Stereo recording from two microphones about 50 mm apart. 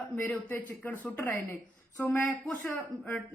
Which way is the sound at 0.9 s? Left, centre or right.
Left.